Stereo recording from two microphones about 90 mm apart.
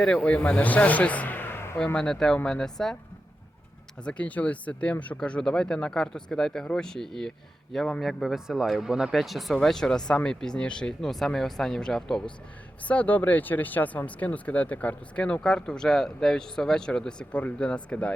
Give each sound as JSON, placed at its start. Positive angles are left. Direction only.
{"t": 0.0, "sound": "speech", "side_deg": 10}
{"t": 1.8, "sound": "speech", "side_deg": 10}
{"t": 4.0, "sound": "speech", "side_deg": 15}
{"t": 12.9, "sound": "speech", "side_deg": 15}